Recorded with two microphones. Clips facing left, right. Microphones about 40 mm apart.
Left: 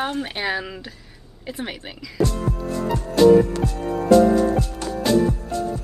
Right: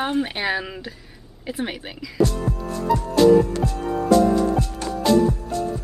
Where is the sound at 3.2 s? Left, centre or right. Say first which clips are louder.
Left 2 dB; centre.